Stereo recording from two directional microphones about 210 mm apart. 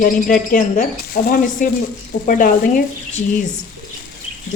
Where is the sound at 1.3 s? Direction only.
40° left (ahead or behind).